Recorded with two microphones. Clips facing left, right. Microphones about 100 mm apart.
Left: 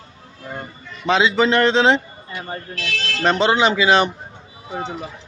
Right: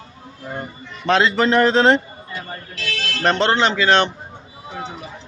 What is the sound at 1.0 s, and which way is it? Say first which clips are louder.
Speech: even; centre (ahead or behind).